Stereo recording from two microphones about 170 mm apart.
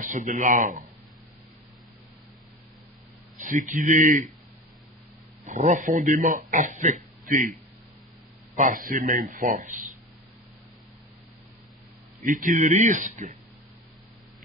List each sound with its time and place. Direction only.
0.0 s speech: 50° right (ahead or behind)
3.3 s speech: 45° right (ahead or behind)
5.5 s speech: 45° right (ahead or behind)
8.5 s speech: 50° right (ahead or behind)
12.2 s speech: 50° right (ahead or behind)